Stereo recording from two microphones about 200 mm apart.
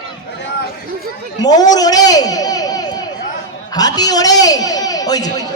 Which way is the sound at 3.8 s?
20° left (ahead or behind).